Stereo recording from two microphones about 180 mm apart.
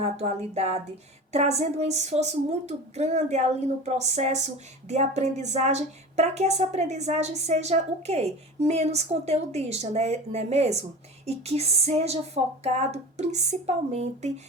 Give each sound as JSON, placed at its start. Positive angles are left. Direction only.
{"t": 0.0, "sound": "speech", "side_deg": -35}